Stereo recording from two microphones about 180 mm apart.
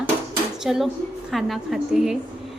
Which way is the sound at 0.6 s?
Centre (ahead or behind).